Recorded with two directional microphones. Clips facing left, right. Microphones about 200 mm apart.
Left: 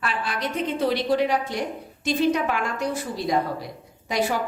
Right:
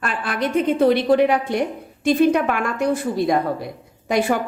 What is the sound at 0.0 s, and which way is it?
A woman's voice, 50° right (ahead or behind).